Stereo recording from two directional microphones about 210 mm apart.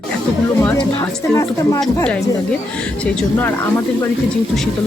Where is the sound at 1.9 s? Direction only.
5° left (ahead or behind).